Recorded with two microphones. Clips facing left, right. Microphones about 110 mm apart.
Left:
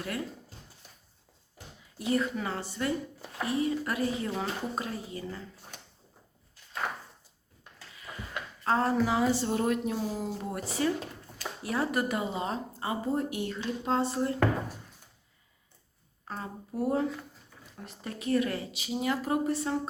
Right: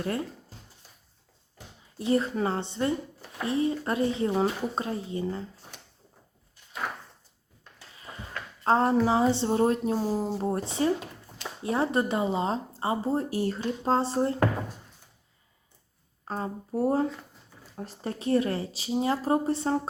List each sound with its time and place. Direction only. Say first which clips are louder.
0.0 s speech: right 5 dB; 30° right (ahead or behind)
2.0 s speech: right 4 dB; 30° right (ahead or behind)
8.1 s a sound: even; 30° right (ahead or behind)
8.6 s speech: right 4 dB; 30° right (ahead or behind)
16.2 s speech: right 6 dB; 35° right (ahead or behind)